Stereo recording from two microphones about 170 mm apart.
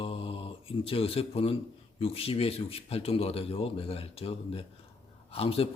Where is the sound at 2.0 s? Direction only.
35° left (ahead or behind).